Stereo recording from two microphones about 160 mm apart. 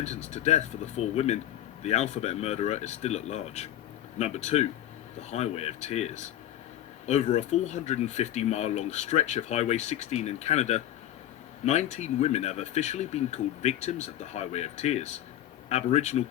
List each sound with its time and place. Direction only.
0.0 s speech: 45° left (ahead or behind)